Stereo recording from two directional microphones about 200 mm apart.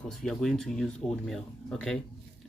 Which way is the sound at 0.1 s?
Centre (ahead or behind).